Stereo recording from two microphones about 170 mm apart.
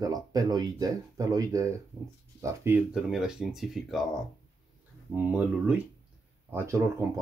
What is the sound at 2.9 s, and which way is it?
Speech, 5° right (ahead or behind).